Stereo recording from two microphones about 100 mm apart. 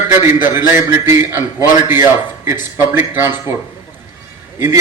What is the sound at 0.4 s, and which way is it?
A man's voice, 25° right (ahead or behind).